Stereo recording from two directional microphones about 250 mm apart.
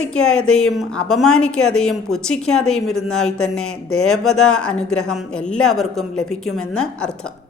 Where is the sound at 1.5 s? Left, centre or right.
Left.